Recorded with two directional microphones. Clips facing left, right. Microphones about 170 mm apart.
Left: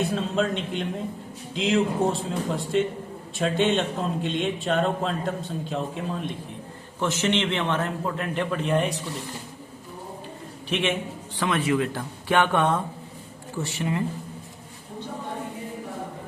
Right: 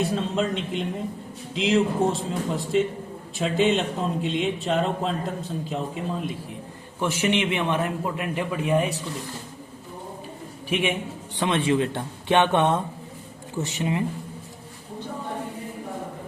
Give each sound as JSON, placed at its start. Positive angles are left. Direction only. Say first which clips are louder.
{"t": 0.0, "sound": "a man's voice", "louder": "even", "side_deg": 0}
{"t": 7.0, "sound": "a man's voice", "louder": "right 1 dB", "side_deg": -10}
{"t": 10.7, "sound": "a man's voice", "louder": "right 1 dB", "side_deg": -10}
{"t": 11.3, "sound": "speech", "louder": "right 1 dB", "side_deg": -25}